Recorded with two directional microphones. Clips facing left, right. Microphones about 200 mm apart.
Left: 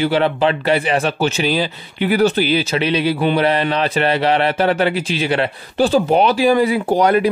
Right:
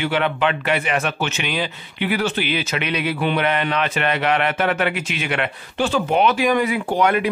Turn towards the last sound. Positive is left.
turn(degrees=35)  # may be behind; listen again after turning